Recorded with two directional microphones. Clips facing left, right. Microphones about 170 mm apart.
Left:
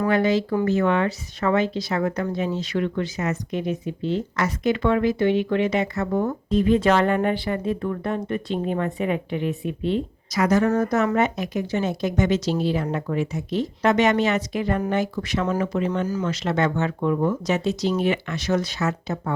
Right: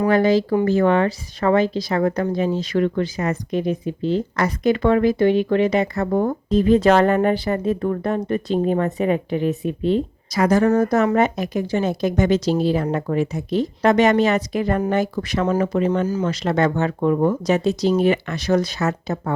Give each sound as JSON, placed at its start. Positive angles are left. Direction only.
{"t": 0.1, "sound": "speech", "side_deg": -35}